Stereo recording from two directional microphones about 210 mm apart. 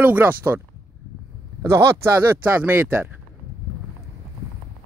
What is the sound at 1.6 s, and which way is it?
Speech, 15° right (ahead or behind).